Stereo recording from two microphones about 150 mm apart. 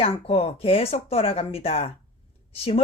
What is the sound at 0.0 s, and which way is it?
A woman's voice, 40° left (ahead or behind).